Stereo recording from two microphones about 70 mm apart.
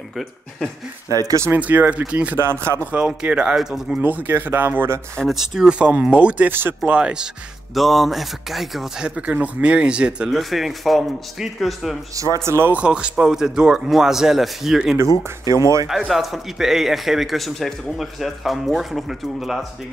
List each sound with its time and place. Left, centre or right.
1.0 s speech: right
1.6 s a man's voice: right; by 4.0 s centre
4.0 s speech: right
5.3 s a man's voice: centre
5.8 s a man's voice: centre
7.7 s a man's voice: centre
9.0 s a man's voice: centre
10.3 s a man's voice: centre
12.4 s speech: right
12.7 s a man's voice: centre
15.5 s speech: right
16.1 s a man's voice: centre